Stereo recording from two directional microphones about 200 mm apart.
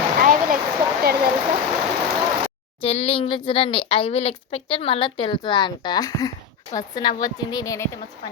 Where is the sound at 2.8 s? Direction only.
30° left (ahead or behind).